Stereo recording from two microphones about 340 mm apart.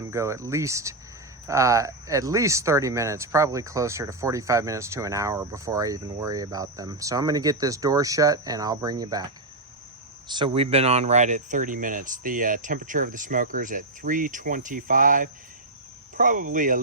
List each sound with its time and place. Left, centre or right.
0.0 s speech: centre; by 16.8 s right